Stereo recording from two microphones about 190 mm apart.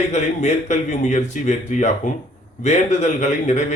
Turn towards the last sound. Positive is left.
turn(degrees=40)  # may be behind; listen again after turning